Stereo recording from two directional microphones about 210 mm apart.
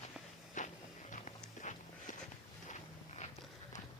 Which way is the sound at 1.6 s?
35° left (ahead or behind).